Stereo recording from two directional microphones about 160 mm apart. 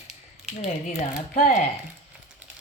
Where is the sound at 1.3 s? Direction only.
45° left (ahead or behind).